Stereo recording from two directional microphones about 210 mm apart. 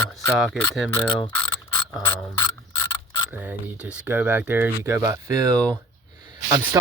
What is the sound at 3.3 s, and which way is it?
Speech, 5° right (ahead or behind).